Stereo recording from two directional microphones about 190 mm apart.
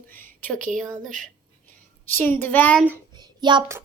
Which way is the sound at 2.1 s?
10° left (ahead or behind).